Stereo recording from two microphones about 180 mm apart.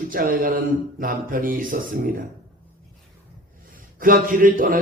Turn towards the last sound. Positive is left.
turn(degrees=-50)  # may be behind; listen again after turning